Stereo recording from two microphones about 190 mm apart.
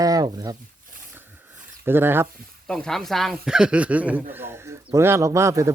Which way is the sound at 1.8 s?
10° right (ahead or behind).